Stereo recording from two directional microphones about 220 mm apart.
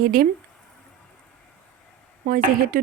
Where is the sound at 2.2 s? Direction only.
40° right (ahead or behind).